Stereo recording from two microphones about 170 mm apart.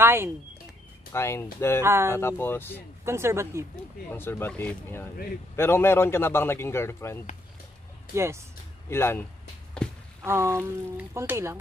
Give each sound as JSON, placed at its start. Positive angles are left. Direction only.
{"t": 0.0, "sound": "speech", "side_deg": -15}
{"t": 1.1, "sound": "a man's voice", "side_deg": 15}
{"t": 1.8, "sound": "speech", "side_deg": -15}
{"t": 2.1, "sound": "a man's voice", "side_deg": 15}
{"t": 3.1, "sound": "speech", "side_deg": -15}
{"t": 4.1, "sound": "a man's voice", "side_deg": 15}
{"t": 8.1, "sound": "speech", "side_deg": -15}
{"t": 8.8, "sound": "speech", "side_deg": 15}
{"t": 9.8, "sound": "a sound", "side_deg": 5}
{"t": 10.2, "sound": "speech", "side_deg": -15}